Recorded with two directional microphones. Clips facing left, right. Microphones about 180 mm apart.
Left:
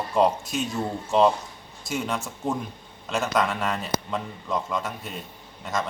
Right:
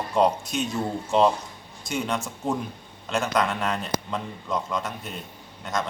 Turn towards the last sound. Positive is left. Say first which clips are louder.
# even
turn(degrees=0)  # may be behind; listen again after turning